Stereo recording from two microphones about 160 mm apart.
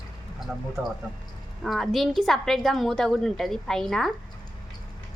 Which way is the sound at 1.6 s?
Centre (ahead or behind).